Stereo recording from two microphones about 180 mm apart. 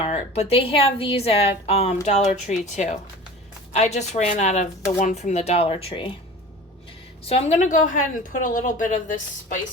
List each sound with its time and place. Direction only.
0.0 s a woman's voice: 35° left (ahead or behind)
7.3 s a woman's voice: 35° left (ahead or behind)